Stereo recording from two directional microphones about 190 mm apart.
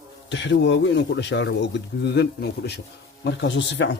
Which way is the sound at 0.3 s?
70° left (ahead or behind).